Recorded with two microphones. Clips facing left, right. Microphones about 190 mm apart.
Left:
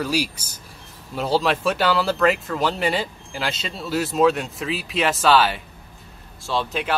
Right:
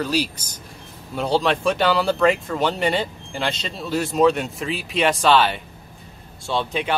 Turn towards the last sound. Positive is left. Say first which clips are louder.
# right 1 dB
turn(degrees=0)  # may be behind; listen again after turning